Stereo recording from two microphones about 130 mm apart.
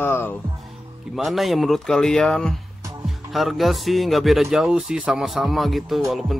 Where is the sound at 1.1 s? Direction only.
Centre (ahead or behind).